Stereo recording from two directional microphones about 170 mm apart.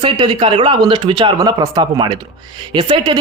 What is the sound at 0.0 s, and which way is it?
A man's voice, 30° right (ahead or behind).